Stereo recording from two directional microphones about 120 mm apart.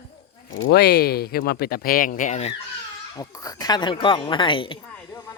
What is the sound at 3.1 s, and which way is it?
Speech, 30° left (ahead or behind).